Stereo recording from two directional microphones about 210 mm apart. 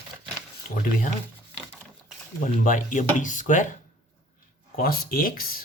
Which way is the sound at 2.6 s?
40° left (ahead or behind).